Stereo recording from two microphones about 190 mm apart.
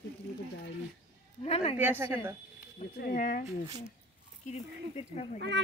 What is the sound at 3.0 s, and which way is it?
Speech, 50° left (ahead or behind).